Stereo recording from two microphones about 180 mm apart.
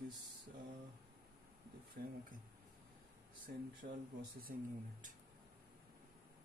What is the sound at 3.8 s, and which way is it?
Speech, 50° right (ahead or behind).